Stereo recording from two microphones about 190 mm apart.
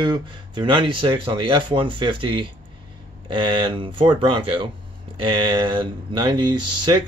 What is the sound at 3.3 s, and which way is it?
Speech, 25° right (ahead or behind).